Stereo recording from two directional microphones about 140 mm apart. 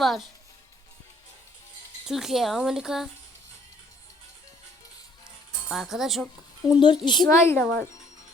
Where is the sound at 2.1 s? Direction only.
Centre (ahead or behind).